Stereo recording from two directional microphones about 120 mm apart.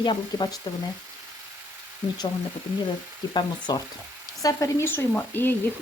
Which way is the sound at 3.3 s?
40° left (ahead or behind).